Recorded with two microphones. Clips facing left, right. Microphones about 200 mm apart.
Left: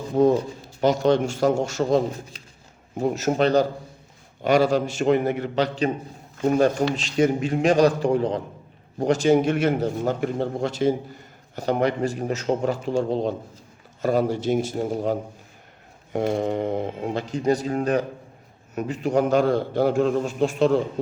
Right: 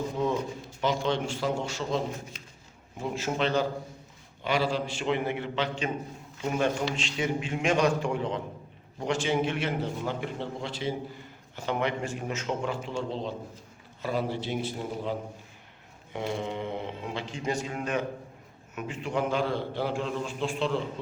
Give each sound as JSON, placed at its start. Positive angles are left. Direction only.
{"t": 0.2, "sound": "a man's voice", "side_deg": 40}